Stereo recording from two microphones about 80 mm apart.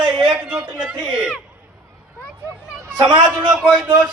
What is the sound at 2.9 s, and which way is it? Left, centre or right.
Speech, right.